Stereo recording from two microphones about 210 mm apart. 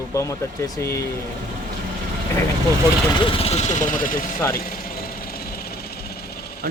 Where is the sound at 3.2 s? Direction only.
25° left (ahead or behind).